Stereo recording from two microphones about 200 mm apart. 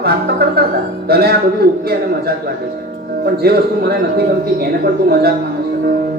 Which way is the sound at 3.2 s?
50° right (ahead or behind).